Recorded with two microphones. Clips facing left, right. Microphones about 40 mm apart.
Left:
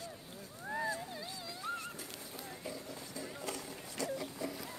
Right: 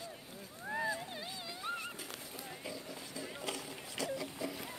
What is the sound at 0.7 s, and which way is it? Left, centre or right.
Boat, centre.